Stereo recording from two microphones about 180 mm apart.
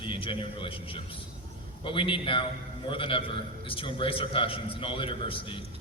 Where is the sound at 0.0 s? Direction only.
30° left (ahead or behind).